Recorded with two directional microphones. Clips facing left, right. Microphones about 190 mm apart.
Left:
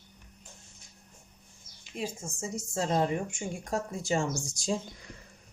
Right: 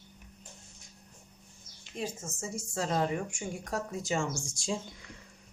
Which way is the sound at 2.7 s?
25° left (ahead or behind).